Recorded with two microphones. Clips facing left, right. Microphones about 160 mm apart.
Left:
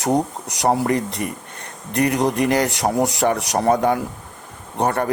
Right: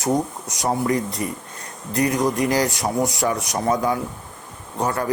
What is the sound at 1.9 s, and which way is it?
Speech, 65° left (ahead or behind).